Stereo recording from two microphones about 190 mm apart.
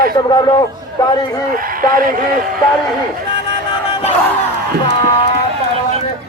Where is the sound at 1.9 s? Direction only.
50° right (ahead or behind).